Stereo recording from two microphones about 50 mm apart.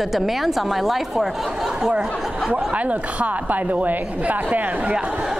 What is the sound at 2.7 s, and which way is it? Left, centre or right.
A woman's voice, right.